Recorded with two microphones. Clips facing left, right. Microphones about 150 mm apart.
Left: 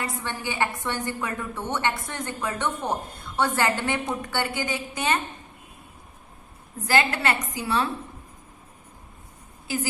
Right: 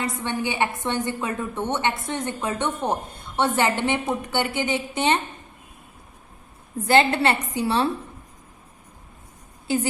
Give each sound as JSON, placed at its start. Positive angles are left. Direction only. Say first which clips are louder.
{"t": 0.0, "sound": "a woman's voice", "louder": "right 5 dB", "side_deg": -20}
{"t": 6.8, "sound": "a woman's voice", "louder": "right 5 dB", "side_deg": -25}